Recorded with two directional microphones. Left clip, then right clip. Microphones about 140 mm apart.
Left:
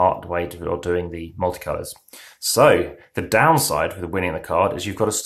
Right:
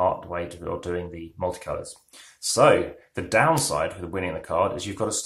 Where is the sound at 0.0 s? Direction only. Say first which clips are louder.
Left 5 dB; 30° left (ahead or behind).